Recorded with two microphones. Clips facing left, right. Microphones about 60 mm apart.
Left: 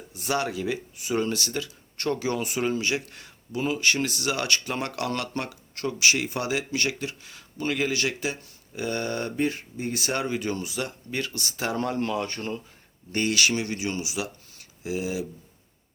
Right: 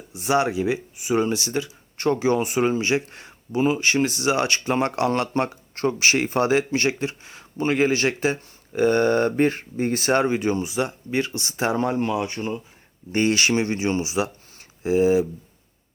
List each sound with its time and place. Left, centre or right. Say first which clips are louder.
0.1 s speech: right 6 dB; right
13.1 s speech: right 4 dB; right